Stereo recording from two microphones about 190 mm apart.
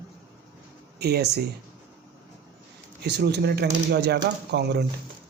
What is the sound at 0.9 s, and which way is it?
Speech, 60° right (ahead or behind).